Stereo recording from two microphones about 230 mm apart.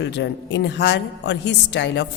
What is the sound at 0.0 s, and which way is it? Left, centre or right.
A woman's voice, left.